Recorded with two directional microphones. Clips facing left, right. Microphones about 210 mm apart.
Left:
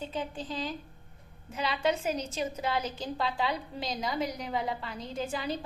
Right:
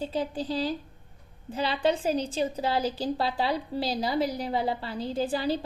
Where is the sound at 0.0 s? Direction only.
35° right (ahead or behind).